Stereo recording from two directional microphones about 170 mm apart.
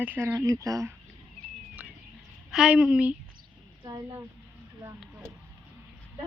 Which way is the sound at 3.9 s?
20° right (ahead or behind).